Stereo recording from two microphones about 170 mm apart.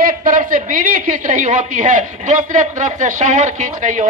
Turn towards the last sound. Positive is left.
turn(degrees=-45)  # may be behind; listen again after turning